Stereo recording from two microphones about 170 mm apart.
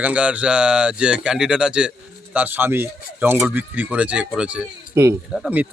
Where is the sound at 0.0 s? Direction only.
10° right (ahead or behind).